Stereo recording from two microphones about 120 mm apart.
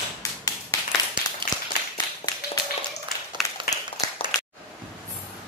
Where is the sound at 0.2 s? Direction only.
30° left (ahead or behind).